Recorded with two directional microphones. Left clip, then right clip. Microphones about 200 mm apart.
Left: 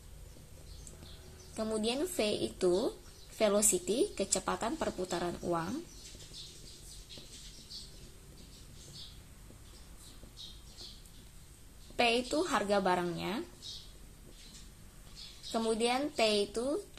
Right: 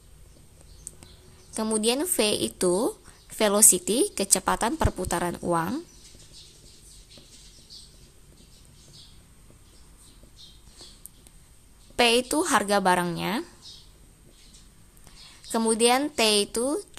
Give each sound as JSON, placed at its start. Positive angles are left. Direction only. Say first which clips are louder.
{"t": 1.5, "sound": "a woman's voice", "louder": "right 9 dB", "side_deg": -40}
{"t": 12.0, "sound": "a woman's voice", "louder": "right 8 dB", "side_deg": -40}
{"t": 15.5, "sound": "a woman's voice", "louder": "right 10 dB", "side_deg": -40}